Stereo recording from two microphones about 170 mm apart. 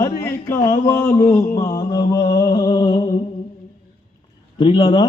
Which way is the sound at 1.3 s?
20° left (ahead or behind).